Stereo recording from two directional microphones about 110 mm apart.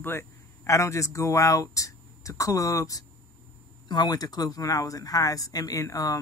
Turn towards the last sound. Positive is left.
turn(degrees=30)  # may be behind; listen again after turning